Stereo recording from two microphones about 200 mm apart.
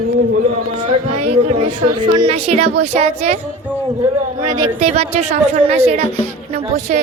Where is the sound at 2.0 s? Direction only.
25° right (ahead or behind).